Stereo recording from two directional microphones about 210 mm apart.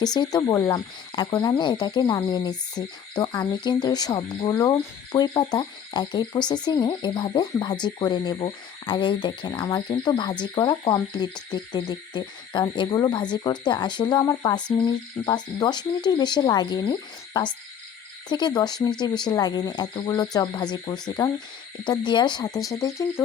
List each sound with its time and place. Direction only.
0.0 s speech: 20° left (ahead or behind)
22.7 s frog: 15° left (ahead or behind)